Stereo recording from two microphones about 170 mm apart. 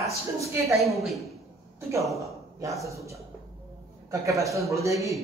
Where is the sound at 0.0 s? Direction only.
20° right (ahead or behind).